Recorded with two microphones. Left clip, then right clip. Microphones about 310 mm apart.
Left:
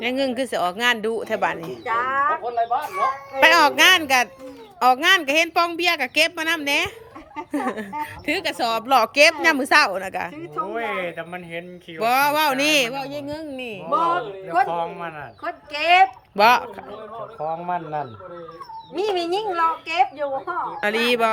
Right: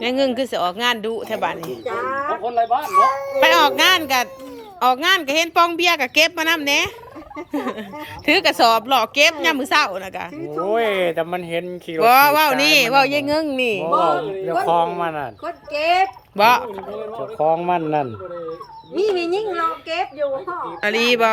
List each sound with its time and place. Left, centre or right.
0.0 s speech: centre
2.7 s speech: right
3.4 s speech: centre
10.7 s speech: right
11.9 s speech: centre
13.0 s speech: centre
13.4 s speech: centre
14.4 s speech: centre
15.8 s speech: centre
16.9 s speech: right
18.9 s speech: left
20.8 s speech: centre